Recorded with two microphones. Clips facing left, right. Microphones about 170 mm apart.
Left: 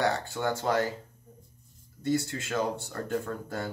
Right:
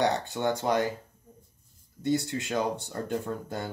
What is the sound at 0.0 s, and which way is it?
Speech, 20° right (ahead or behind).